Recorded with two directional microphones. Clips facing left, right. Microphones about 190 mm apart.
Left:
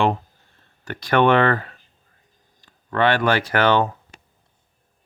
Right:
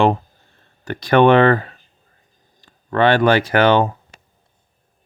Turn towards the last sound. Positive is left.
turn(degrees=-15)  # may be behind; listen again after turning